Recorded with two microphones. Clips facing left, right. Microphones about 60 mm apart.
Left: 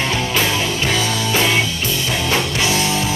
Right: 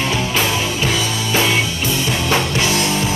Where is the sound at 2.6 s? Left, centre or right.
Left.